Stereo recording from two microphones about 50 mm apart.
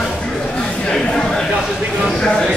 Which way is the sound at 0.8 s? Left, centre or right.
Centre.